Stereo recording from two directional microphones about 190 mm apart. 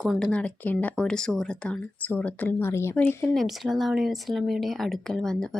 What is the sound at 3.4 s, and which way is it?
Speech, centre (ahead or behind).